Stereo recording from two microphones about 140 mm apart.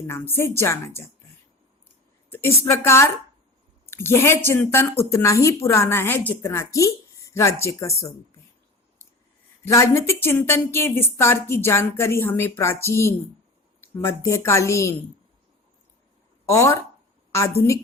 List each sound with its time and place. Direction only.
0.1 s a woman's voice: 15° left (ahead or behind)
2.3 s a woman's voice: 20° left (ahead or behind)
9.6 s a woman's voice: 20° left (ahead or behind)
16.5 s a woman's voice: 20° left (ahead or behind)